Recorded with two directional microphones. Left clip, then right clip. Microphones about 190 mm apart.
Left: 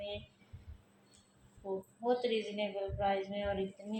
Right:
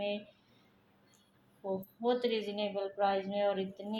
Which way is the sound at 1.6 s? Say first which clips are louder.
Right 3 dB; 55° right (ahead or behind).